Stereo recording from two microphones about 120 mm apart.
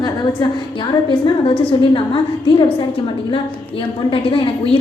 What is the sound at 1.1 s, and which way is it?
A woman's voice, 45° left (ahead or behind).